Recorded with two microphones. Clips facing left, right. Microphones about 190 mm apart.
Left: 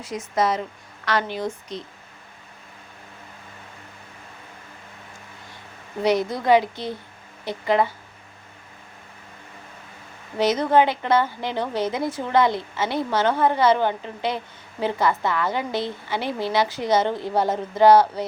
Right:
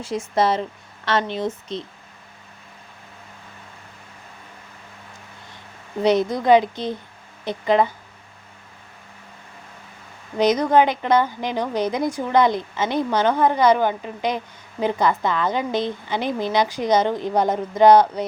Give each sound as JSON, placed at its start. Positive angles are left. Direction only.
{"t": 0.0, "sound": "a woman's voice", "side_deg": -30}
{"t": 6.0, "sound": "a woman's voice", "side_deg": -20}
{"t": 10.3, "sound": "a woman's voice", "side_deg": -15}